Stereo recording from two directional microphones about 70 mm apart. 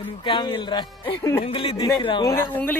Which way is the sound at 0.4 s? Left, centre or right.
Left.